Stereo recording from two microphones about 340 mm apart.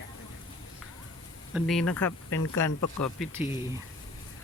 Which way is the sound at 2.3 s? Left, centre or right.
Left.